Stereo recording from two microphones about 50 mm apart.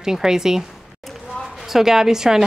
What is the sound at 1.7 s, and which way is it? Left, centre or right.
Speech, centre.